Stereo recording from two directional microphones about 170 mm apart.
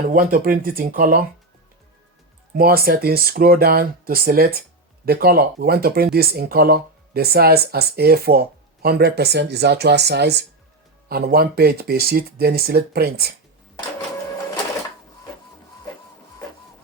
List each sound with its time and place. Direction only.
0.1 s speech: 55° right (ahead or behind)
2.6 s speech: 60° right (ahead or behind)
11.1 s speech: 65° right (ahead or behind)